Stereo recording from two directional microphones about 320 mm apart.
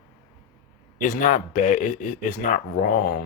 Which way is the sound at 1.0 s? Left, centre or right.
Left.